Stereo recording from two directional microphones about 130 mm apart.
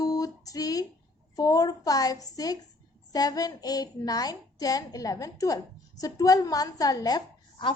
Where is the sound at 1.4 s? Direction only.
30° left (ahead or behind).